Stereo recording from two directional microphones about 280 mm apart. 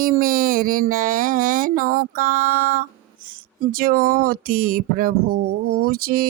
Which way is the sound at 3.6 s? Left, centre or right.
Right.